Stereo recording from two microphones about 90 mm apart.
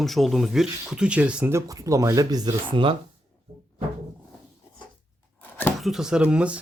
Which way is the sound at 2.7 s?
70° right (ahead or behind).